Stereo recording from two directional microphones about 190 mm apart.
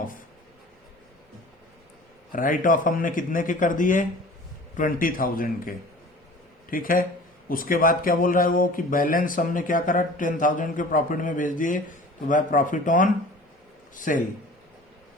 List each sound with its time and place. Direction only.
2.3 s speech: 45° left (ahead or behind)